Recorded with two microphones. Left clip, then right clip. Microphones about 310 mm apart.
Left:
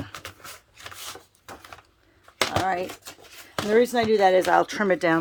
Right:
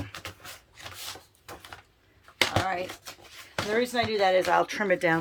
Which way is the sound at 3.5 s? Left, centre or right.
Left.